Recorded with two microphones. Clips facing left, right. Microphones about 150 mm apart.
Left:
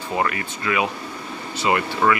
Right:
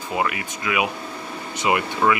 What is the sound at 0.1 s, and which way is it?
Speech, 10° right (ahead or behind).